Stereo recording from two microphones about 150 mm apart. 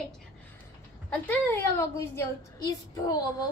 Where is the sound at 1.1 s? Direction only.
10° left (ahead or behind).